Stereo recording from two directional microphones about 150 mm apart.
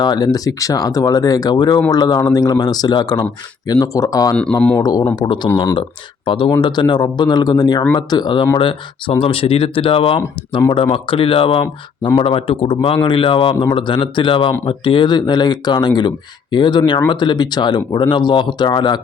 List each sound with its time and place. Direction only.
0.0 s speech: 25° left (ahead or behind)